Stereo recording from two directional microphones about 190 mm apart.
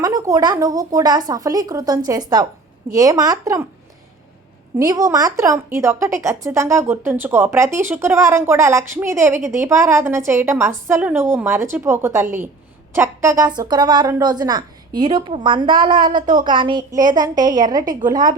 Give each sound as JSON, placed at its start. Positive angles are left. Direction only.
{"t": 0.0, "sound": "a woman's voice", "side_deg": -20}
{"t": 4.8, "sound": "a woman's voice", "side_deg": -20}